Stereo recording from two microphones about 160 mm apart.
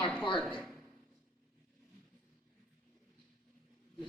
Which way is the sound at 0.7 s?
Centre (ahead or behind).